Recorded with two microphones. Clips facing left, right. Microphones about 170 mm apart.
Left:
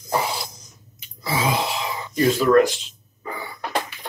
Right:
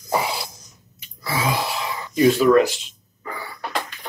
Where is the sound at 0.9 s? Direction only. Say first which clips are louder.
Left 1 dB; 20° left (ahead or behind).